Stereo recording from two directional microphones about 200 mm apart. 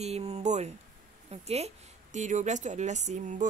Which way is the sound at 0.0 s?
35° right (ahead or behind).